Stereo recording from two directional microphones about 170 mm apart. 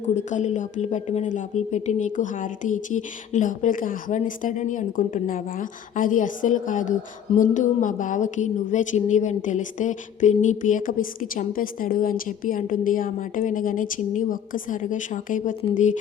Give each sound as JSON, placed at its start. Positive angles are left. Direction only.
{"t": 0.1, "sound": "a woman's voice", "side_deg": 45}